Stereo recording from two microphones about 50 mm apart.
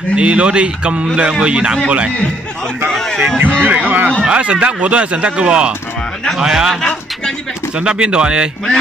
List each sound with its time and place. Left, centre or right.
0.1 s speech: right
2.9 s a sound: centre
3.3 s speech: right; by 6.7 s centre
7.7 s speech: right